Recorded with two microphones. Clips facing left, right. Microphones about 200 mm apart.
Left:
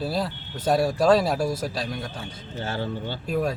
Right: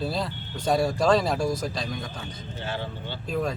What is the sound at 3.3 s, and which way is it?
Speech, 5° left (ahead or behind).